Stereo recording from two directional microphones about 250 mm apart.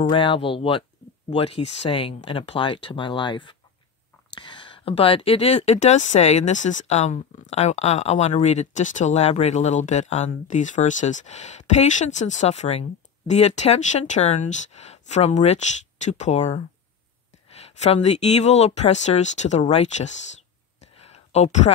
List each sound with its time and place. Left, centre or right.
0.1 s speech: centre
17.7 s speech: left
21.0 s a sound: left